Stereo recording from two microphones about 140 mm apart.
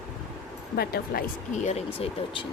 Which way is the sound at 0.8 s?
90° left.